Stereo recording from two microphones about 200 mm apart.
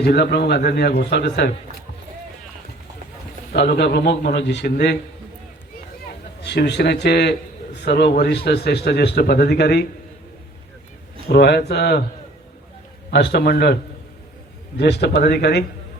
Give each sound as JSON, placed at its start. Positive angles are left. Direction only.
{"t": 0.0, "sound": "a man's voice", "side_deg": 55}
{"t": 3.5, "sound": "a man's voice", "side_deg": 55}
{"t": 6.4, "sound": "a man's voice", "side_deg": 55}
{"t": 11.3, "sound": "a man's voice", "side_deg": 55}
{"t": 13.1, "sound": "a man's voice", "side_deg": 60}
{"t": 14.8, "sound": "a man's voice", "side_deg": 60}